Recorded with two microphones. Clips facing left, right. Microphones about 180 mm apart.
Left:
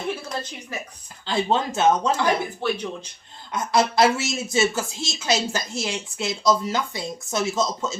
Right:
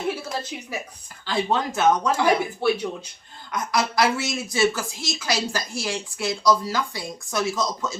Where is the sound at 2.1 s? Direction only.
10° right (ahead or behind).